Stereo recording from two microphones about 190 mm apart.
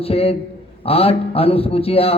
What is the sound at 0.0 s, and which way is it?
A man's voice, 30° left (ahead or behind).